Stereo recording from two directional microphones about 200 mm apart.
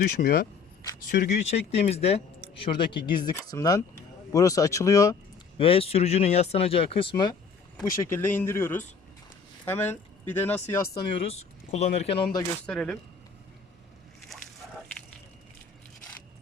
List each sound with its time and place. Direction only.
0.2 s speech: 50° left (ahead or behind); by 5.1 s 15° left (ahead or behind)
5.5 s speech: 30° left (ahead or behind)
7.8 s speech: 10° left (ahead or behind)
11.3 s speech: 35° left (ahead or behind)
12.6 s speech: 5° left (ahead or behind)